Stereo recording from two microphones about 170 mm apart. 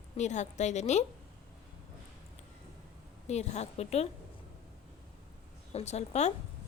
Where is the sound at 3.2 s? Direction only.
40° left (ahead or behind).